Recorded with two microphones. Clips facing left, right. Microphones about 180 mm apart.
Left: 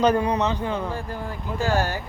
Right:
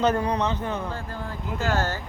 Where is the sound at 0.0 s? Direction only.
10° left (ahead or behind).